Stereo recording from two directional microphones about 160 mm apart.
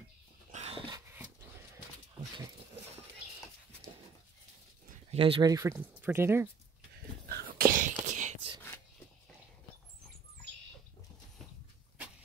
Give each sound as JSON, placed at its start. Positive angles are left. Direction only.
{"t": 0.5, "sound": "dog", "side_deg": -40}
{"t": 5.1, "sound": "speech", "side_deg": -35}
{"t": 5.5, "sound": "speech", "side_deg": -15}
{"t": 7.2, "sound": "whispering", "side_deg": -70}
{"t": 8.0, "sound": "whispering", "side_deg": -45}